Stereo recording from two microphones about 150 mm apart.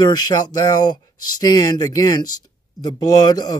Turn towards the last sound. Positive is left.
turn(degrees=25)  # may be behind; listen again after turning